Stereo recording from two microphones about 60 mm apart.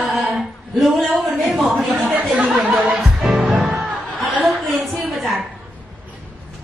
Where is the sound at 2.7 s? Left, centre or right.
Right.